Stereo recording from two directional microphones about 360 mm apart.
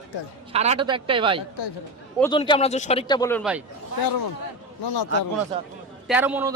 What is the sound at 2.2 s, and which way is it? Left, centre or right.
Speech, centre.